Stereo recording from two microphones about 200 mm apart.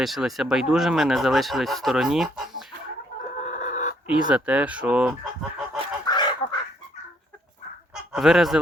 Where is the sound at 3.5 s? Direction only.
35° left (ahead or behind).